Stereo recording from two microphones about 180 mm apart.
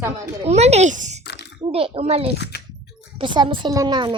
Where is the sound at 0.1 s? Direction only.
35° right (ahead or behind).